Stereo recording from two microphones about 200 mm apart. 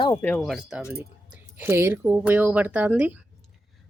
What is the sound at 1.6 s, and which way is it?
A man's voice, 10° right (ahead or behind).